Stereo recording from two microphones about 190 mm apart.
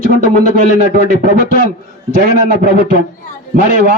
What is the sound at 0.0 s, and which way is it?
Speech, 45° right (ahead or behind).